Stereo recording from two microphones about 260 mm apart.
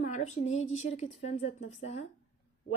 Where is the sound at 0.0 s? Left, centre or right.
Left.